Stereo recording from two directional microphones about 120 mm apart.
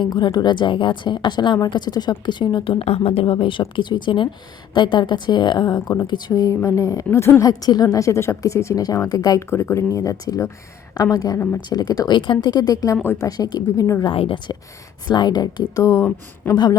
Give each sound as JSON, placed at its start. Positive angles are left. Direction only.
{"t": 0.0, "sound": "a woman's voice", "side_deg": 40}
{"t": 9.5, "sound": "a woman's voice", "side_deg": 20}
{"t": 13.2, "sound": "a woman's voice", "side_deg": 30}
{"t": 14.0, "sound": "a woman's voice", "side_deg": 45}
{"t": 16.4, "sound": "speech", "side_deg": 15}